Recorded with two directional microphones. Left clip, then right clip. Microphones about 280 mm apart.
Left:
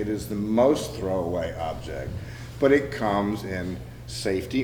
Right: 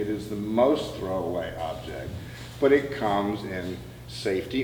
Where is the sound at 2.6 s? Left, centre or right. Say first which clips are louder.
Left 1 dB; left.